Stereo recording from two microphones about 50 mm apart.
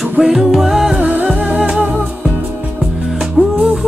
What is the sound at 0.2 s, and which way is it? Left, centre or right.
Music, centre.